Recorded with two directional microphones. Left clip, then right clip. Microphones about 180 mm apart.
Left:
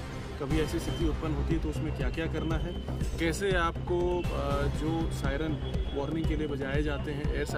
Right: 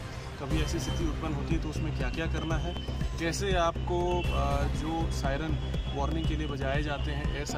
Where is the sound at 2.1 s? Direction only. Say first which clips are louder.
Even; 5° left (ahead or behind).